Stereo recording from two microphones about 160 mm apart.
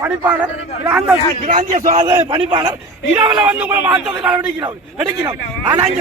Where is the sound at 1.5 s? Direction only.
55° right (ahead or behind).